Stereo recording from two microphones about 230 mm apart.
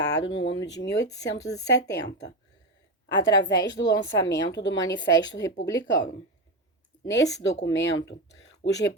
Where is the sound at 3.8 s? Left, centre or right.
Centre.